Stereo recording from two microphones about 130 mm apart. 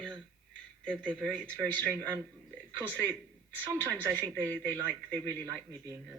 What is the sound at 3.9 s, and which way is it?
Speech, 25° right (ahead or behind).